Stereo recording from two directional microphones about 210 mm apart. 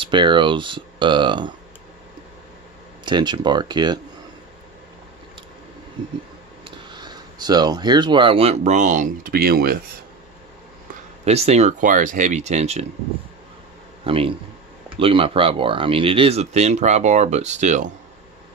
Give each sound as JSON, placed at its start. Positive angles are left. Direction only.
{"t": 0.0, "sound": "speech", "side_deg": -25}
{"t": 3.1, "sound": "speech", "side_deg": -20}
{"t": 6.9, "sound": "speech", "side_deg": -20}
{"t": 11.2, "sound": "speech", "side_deg": -30}
{"t": 14.0, "sound": "speech", "side_deg": -25}